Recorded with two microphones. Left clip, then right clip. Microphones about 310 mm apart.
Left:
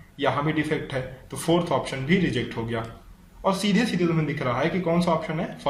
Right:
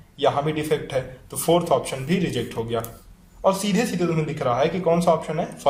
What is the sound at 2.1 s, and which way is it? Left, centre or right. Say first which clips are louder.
A man's voice: left 1 dB; right.